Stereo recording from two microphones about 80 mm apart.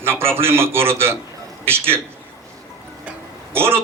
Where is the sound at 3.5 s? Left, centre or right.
Right.